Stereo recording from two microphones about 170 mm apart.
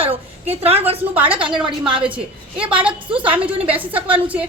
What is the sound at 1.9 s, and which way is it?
Speech, 30° right (ahead or behind).